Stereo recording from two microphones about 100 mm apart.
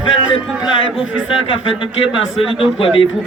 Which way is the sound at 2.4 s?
65° left (ahead or behind).